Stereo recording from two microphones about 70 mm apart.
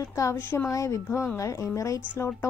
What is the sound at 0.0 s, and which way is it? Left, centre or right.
Speech, left.